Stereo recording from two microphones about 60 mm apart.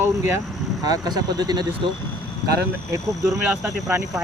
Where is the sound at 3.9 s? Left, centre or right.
Right.